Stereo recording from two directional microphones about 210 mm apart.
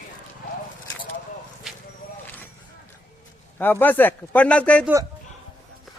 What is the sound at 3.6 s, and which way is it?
A woman's voice, 10° left (ahead or behind).